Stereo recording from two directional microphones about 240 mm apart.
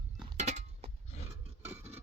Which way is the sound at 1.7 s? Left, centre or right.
Centre.